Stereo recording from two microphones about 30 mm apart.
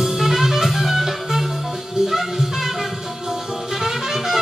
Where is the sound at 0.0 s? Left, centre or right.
Centre.